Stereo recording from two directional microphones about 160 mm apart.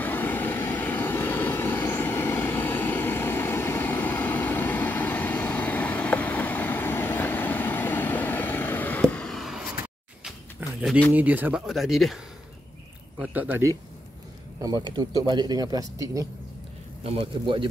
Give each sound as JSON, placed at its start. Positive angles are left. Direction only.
{"t": 0.0, "sound": "vehicle", "side_deg": 10}
{"t": 10.6, "sound": "a sound", "side_deg": -10}
{"t": 11.1, "sound": "speech", "side_deg": -10}
{"t": 13.2, "sound": "speech", "side_deg": -10}
{"t": 14.6, "sound": "speech", "side_deg": -25}
{"t": 17.0, "sound": "a man's voice", "side_deg": -35}